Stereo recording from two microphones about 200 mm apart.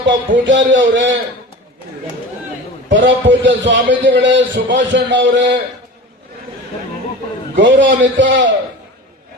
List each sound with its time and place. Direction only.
0.0 s a man's voice: 70° right (ahead or behind)
2.9 s a man's voice: 65° right (ahead or behind)
7.5 s a man's voice: 65° right (ahead or behind)